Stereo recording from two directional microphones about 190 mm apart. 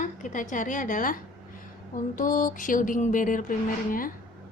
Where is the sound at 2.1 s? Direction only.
45° left (ahead or behind).